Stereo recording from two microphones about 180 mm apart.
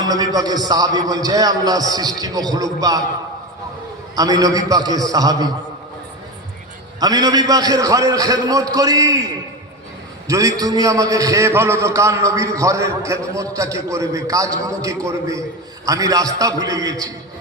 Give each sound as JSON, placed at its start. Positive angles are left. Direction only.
{"t": 0.0, "sound": "a man's voice", "side_deg": -20}
{"t": 4.1, "sound": "a man's voice", "side_deg": -20}
{"t": 7.0, "sound": "a man's voice", "side_deg": -20}
{"t": 10.2, "sound": "a man's voice", "side_deg": -20}